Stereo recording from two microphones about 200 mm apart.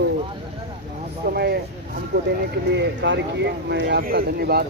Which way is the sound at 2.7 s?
60° right (ahead or behind).